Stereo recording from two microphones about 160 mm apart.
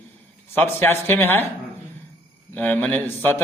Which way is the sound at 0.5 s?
15° left (ahead or behind).